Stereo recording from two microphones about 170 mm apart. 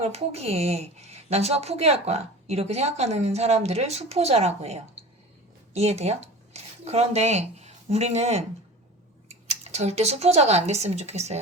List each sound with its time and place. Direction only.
0.0 s a woman's voice: 40° right (ahead or behind)